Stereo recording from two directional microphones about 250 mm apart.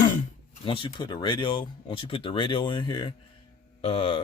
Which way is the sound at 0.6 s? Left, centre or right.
Left.